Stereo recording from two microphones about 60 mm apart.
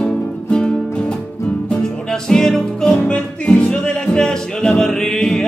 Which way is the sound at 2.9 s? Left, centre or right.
Left.